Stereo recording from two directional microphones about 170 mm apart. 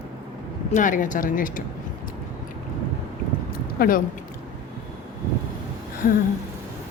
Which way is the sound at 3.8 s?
55° left (ahead or behind).